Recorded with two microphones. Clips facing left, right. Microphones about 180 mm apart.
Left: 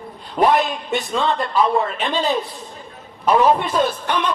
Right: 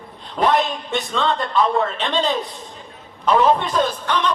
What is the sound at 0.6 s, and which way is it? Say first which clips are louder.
A man's voice: left 1 dB; centre (ahead or behind).